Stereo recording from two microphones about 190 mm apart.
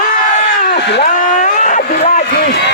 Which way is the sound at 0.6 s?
65° left (ahead or behind).